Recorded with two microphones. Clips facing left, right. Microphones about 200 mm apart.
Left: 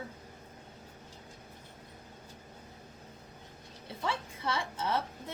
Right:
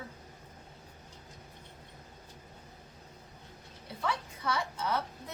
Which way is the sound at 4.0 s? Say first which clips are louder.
Even; 25° left (ahead or behind).